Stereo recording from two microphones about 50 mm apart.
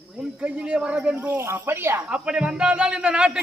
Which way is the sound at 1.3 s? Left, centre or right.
Right.